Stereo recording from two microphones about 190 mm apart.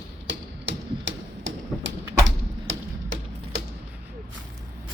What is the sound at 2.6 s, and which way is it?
Music, 80° right.